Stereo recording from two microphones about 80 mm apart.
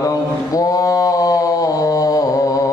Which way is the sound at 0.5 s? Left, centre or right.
Left.